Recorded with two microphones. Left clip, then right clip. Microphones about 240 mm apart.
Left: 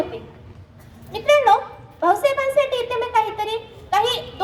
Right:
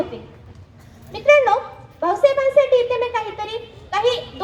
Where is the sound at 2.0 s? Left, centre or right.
Left.